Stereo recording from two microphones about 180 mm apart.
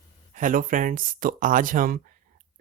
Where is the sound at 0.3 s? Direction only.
45° right (ahead or behind).